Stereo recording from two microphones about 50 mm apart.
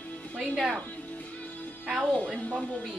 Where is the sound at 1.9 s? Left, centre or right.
Right.